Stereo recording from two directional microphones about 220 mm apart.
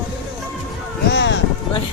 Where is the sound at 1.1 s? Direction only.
55° left (ahead or behind).